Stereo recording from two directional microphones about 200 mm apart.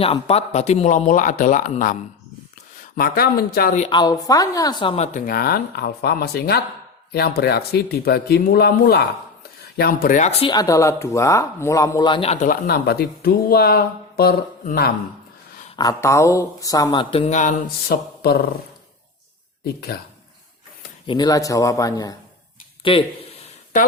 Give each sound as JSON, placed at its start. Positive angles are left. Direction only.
{"t": 0.0, "sound": "speech", "side_deg": 30}
{"t": 3.8, "sound": "speech", "side_deg": 20}
{"t": 5.1, "sound": "speech", "side_deg": 45}
{"t": 10.5, "sound": "speech", "side_deg": 15}
{"t": 15.7, "sound": "speech", "side_deg": 20}
{"t": 17.8, "sound": "speech", "side_deg": 50}
{"t": 21.1, "sound": "speech", "side_deg": 20}